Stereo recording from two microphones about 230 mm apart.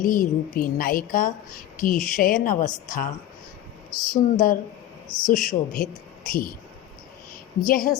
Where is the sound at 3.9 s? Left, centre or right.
Centre.